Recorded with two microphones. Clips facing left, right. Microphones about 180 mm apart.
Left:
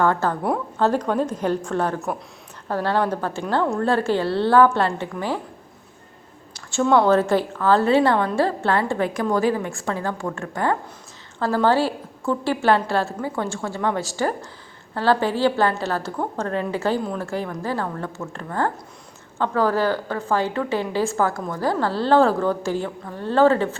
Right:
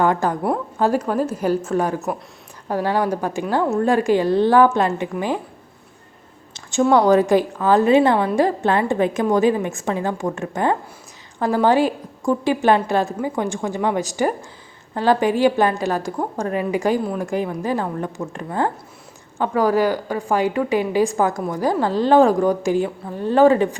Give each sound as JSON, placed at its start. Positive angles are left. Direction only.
{"t": 0.0, "sound": "a woman's voice", "side_deg": -15}
{"t": 6.5, "sound": "a sound", "side_deg": -20}
{"t": 6.8, "sound": "a woman's voice", "side_deg": -15}